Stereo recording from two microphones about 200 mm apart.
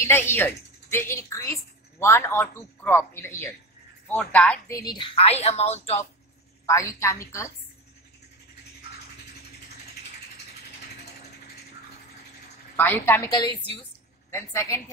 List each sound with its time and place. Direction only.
0.0 s a woman's voice: 10° left (ahead or behind)
4.7 s speech: 20° left (ahead or behind)
6.6 s a woman's voice: 15° left (ahead or behind)
12.7 s a woman's voice: 10° left (ahead or behind)